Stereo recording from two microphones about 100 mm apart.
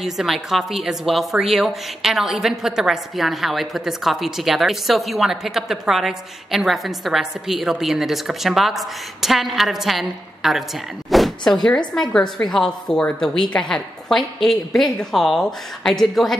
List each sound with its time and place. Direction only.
0.0 s a woman's voice: 5° right (ahead or behind)
11.1 s croak: centre (ahead or behind)
11.9 s a woman's voice: 5° left (ahead or behind)